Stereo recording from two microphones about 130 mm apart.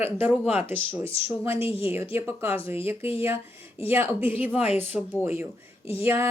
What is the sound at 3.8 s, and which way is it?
Speech, 15° right (ahead or behind).